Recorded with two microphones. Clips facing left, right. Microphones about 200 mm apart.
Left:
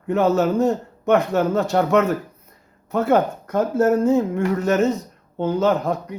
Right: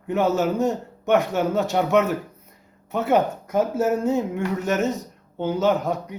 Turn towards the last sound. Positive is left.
turn(degrees=0)  # may be behind; listen again after turning